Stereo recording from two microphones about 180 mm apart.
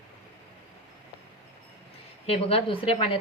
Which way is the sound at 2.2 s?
35° left (ahead or behind).